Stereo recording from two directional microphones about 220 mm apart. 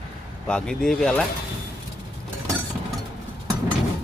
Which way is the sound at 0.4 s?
5° left (ahead or behind).